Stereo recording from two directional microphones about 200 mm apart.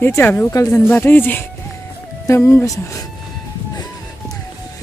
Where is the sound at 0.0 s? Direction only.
10° left (ahead or behind).